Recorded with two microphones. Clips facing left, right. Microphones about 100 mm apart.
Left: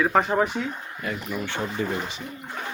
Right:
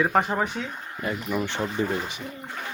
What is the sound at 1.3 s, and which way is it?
Speech, 20° right (ahead or behind).